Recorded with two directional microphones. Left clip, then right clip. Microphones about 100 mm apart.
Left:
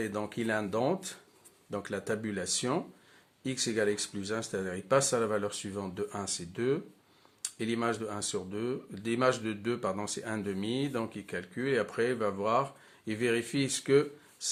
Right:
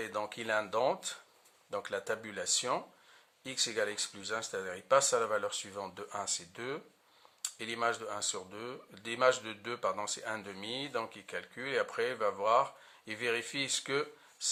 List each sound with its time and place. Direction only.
0.0 s speech: 40° right (ahead or behind)